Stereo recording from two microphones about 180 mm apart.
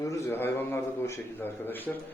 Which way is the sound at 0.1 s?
15° left (ahead or behind).